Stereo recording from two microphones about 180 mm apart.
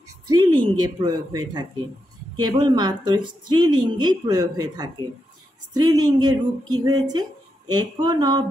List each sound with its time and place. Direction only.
0.3 s speech: 25° right (ahead or behind)